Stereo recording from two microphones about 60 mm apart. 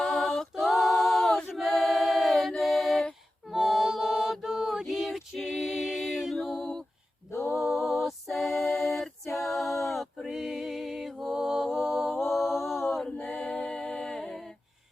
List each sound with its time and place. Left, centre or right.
0.0 s a capella: centre
7.3 s a capella: left
7.5 s music: centre
9.3 s a sound: centre
12.6 s a capella: centre
13.1 s a capella: left
13.3 s humming: centre